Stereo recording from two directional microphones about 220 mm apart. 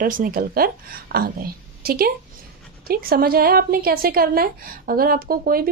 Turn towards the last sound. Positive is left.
turn(degrees=-40)  # may be behind; listen again after turning